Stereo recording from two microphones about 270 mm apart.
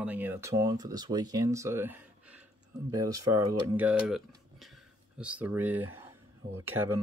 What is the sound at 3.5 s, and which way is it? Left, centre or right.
Speech, centre.